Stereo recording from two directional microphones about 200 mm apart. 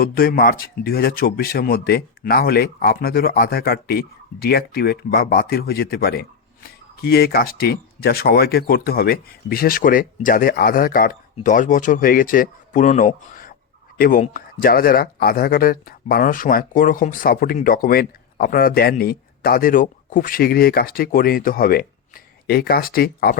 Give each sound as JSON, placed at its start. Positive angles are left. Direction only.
{"t": 0.0, "sound": "speech", "side_deg": 50}